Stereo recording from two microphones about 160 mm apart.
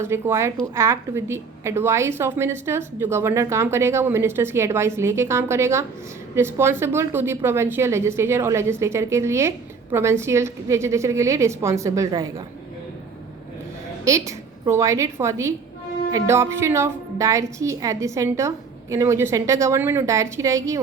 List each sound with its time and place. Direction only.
0.0 s a woman's voice: 15° right (ahead or behind)
14.0 s a woman's voice: 20° right (ahead or behind)